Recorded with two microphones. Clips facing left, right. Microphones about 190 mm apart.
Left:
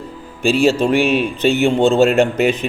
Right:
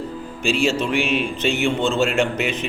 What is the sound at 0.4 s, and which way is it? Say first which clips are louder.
A man's voice: left 6 dB; 40° left (ahead or behind).